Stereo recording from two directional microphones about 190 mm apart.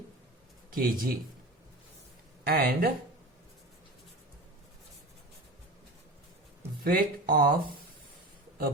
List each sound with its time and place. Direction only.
0.7 s speech: 50° right (ahead or behind)
2.4 s speech: 55° right (ahead or behind)
6.8 s speech: 50° right (ahead or behind)